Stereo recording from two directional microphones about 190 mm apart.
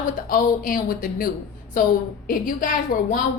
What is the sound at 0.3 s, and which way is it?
A woman's voice, 45° left (ahead or behind).